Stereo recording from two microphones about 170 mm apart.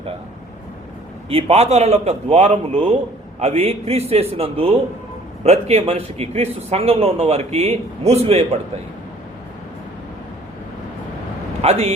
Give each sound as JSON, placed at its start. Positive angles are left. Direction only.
{"t": 1.3, "sound": "a man's voice", "side_deg": -35}
{"t": 11.6, "sound": "a man's voice", "side_deg": -40}